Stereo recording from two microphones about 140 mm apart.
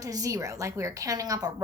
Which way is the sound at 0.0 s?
25° right (ahead or behind).